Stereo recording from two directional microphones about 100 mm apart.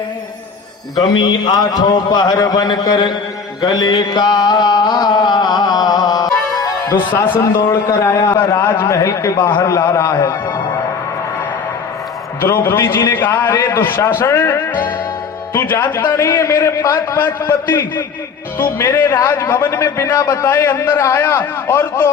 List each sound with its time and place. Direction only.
0.9 s a man's voice: 40° left (ahead or behind)
3.6 s a sound: 45° left (ahead or behind)
7.2 s a man's voice: 35° left (ahead or behind)
9.4 s a man's voice: 50° left (ahead or behind)
9.6 s a man's voice: 35° left (ahead or behind)
12.4 s a man's voice: 20° left (ahead or behind)
14.7 s a man's voice: 45° left (ahead or behind)
15.5 s a man's voice: 25° left (ahead or behind)
16.0 s a man's voice: 35° left (ahead or behind)
17.7 s a man's voice: 20° left (ahead or behind)